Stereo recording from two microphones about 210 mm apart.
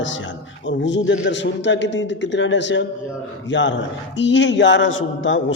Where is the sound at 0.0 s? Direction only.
65° left (ahead or behind).